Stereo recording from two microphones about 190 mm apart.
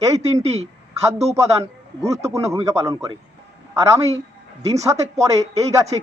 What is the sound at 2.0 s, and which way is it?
Speech, 15° right (ahead or behind).